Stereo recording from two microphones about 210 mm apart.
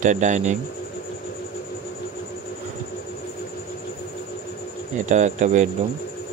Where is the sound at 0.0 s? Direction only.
35° right (ahead or behind).